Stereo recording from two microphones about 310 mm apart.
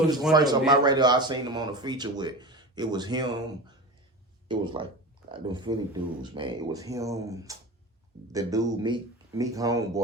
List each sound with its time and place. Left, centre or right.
0.3 s speech: centre